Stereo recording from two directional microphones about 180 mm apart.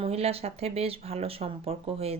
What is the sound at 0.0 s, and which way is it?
Speech, 35° right (ahead or behind).